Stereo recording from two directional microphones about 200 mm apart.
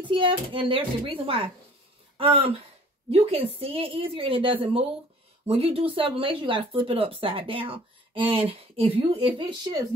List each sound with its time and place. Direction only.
0.0 s speech: 25° right (ahead or behind)